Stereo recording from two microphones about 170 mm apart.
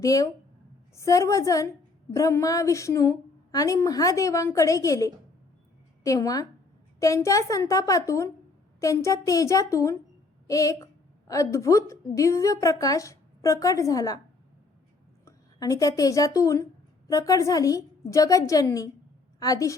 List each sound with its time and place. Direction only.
0.0 s a woman's voice: 20° left (ahead or behind)
15.2 s a woman's voice: 20° left (ahead or behind)